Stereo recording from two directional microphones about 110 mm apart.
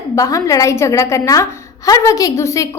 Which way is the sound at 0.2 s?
30° left (ahead or behind).